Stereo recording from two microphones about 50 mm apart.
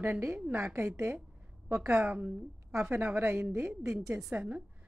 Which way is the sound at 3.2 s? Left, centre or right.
Right.